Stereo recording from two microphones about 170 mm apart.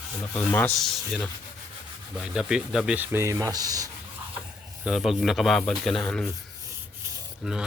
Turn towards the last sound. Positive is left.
turn(degrees=-5)  # may be behind; listen again after turning